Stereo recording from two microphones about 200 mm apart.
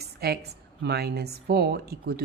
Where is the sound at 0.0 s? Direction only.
50° right (ahead or behind).